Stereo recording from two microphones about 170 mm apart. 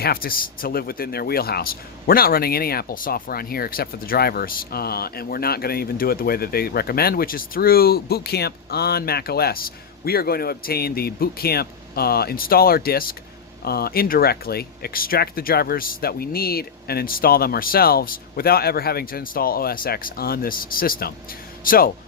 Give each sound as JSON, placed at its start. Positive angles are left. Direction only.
{"t": 0.0, "sound": "speech", "side_deg": 60}